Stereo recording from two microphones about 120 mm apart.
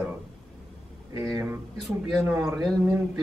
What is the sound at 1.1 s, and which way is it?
Speech, 25° right (ahead or behind).